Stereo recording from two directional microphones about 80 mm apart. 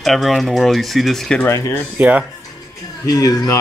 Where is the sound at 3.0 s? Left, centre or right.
Left.